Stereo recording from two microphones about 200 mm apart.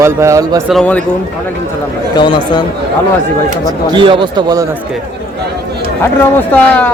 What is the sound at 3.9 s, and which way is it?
Speech, 25° right (ahead or behind).